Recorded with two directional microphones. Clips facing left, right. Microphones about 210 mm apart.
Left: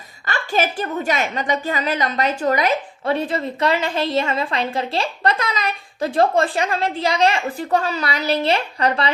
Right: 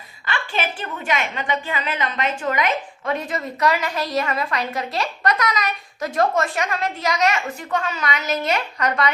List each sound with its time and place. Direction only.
0.3 s a woman's voice: 40° left (ahead or behind)